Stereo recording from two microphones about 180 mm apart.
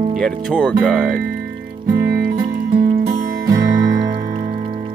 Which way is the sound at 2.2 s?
55° right (ahead or behind).